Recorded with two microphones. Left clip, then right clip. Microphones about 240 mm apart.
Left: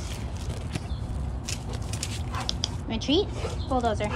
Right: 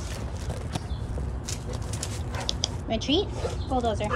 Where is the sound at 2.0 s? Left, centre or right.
Centre.